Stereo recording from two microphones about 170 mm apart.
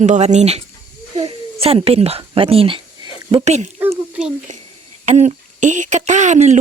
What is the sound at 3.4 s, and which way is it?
Speech, 40° right (ahead or behind).